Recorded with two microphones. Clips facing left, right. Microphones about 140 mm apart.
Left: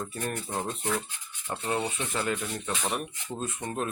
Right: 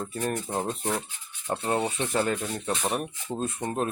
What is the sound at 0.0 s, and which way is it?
Speech, 35° right (ahead or behind).